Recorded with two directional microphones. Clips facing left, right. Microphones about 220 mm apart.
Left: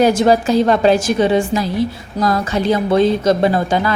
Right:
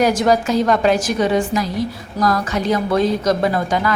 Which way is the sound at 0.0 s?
25° left (ahead or behind).